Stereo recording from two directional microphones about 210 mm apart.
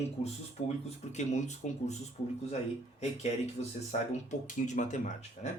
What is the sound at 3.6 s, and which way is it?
Speech, 30° left (ahead or behind).